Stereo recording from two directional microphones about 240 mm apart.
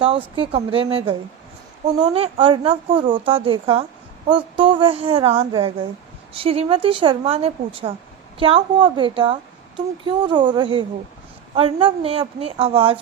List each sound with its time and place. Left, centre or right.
0.0 s a woman's voice: right